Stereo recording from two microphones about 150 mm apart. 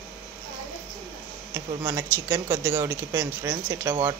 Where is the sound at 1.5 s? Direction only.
15° right (ahead or behind).